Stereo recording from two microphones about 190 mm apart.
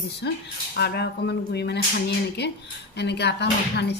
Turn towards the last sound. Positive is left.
turn(degrees=60)  # may be behind; listen again after turning